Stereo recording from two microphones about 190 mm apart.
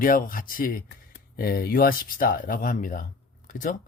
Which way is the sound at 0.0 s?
45° left (ahead or behind).